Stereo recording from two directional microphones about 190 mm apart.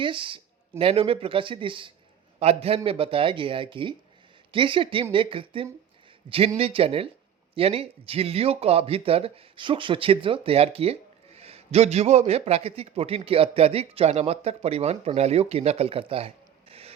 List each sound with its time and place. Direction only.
0.0 s a man's voice: 25° right (ahead or behind)